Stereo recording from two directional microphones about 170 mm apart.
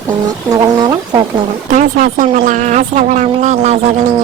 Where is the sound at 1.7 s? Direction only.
50° right (ahead or behind).